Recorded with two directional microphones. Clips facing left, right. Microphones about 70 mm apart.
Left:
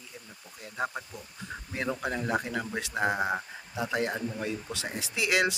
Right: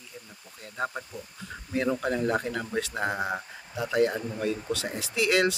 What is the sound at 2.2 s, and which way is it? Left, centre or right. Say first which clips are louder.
Speech: right 2 dB; centre.